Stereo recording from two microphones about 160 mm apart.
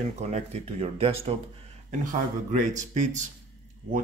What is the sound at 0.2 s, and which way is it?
Speech, 45° right (ahead or behind).